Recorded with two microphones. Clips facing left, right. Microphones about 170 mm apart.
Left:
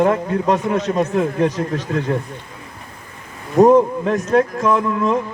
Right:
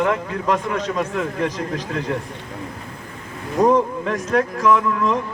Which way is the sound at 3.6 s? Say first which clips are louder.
Left 5 dB; 30° left (ahead or behind).